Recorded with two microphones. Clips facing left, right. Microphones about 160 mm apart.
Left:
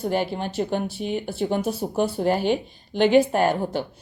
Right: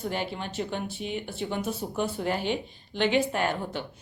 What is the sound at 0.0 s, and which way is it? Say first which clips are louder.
Speech: left 7 dB; 40° left (ahead or behind).